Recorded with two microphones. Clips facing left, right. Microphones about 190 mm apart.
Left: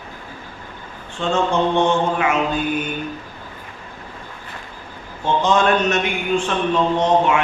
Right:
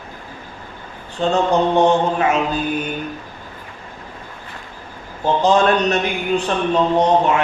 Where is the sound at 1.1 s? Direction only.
35° right (ahead or behind).